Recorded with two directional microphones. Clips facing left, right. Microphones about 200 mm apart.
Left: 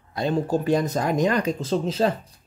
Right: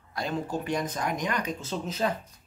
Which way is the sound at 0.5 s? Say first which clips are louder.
Left 8 dB; 35° left (ahead or behind).